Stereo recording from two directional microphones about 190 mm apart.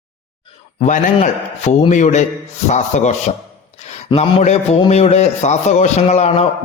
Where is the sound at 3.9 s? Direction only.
30° left (ahead or behind).